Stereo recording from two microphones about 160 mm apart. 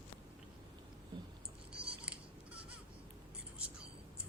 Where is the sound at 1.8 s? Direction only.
5° right (ahead or behind).